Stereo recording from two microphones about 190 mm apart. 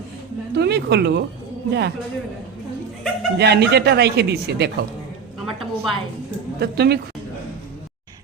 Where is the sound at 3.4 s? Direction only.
60° right (ahead or behind).